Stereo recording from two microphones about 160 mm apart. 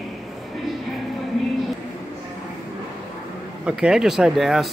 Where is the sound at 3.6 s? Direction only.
5° right (ahead or behind).